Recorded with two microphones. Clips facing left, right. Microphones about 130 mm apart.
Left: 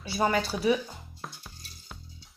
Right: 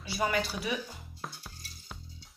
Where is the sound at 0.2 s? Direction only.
30° left (ahead or behind).